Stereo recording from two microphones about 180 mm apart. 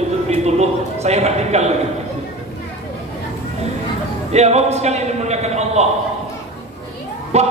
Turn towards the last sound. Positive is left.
turn(degrees=-40)  # may be behind; listen again after turning